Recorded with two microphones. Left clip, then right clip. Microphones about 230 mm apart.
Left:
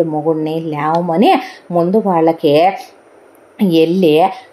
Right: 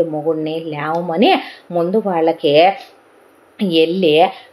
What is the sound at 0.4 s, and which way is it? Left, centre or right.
A woman's voice, left.